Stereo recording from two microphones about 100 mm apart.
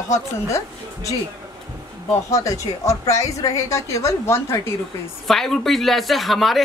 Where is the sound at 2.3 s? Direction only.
30° left (ahead or behind).